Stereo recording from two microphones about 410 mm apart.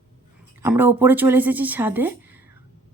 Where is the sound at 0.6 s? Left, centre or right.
Centre.